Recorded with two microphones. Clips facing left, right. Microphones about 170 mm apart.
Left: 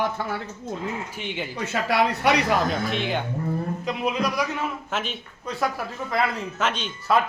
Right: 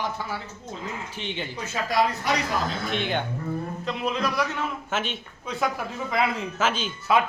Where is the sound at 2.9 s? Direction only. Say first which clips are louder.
Left 1 dB; centre (ahead or behind).